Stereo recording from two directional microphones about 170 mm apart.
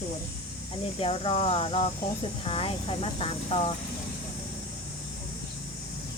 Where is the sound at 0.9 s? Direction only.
35° left (ahead or behind).